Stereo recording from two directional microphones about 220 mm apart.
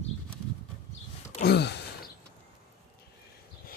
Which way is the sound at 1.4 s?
50° left (ahead or behind).